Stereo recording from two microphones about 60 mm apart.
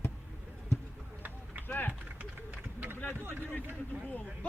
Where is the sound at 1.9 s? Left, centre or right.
Right.